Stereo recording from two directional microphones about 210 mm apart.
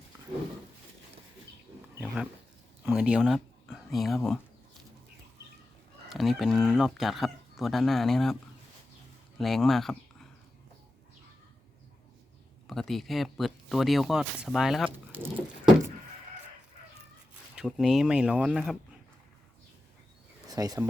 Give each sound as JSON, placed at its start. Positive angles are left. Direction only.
{"t": 2.8, "sound": "speech", "side_deg": -5}
{"t": 6.1, "sound": "speech", "side_deg": 0}
{"t": 9.4, "sound": "speech", "side_deg": 0}
{"t": 12.6, "sound": "speech", "side_deg": 0}
{"t": 17.5, "sound": "speech", "side_deg": 0}
{"t": 20.5, "sound": "speech", "side_deg": -15}